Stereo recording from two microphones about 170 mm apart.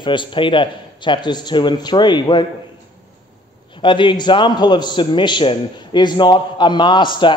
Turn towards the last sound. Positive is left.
turn(degrees=30)  # may be behind; listen again after turning